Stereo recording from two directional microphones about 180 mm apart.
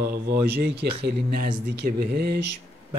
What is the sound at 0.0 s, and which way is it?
A man's voice, 60° right (ahead or behind).